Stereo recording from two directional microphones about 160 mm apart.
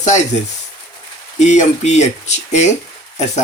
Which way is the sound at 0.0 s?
45° left (ahead or behind).